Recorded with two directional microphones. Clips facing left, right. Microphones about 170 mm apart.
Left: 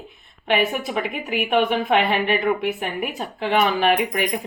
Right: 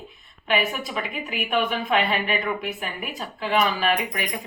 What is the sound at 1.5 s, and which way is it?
Speech, 65° left (ahead or behind).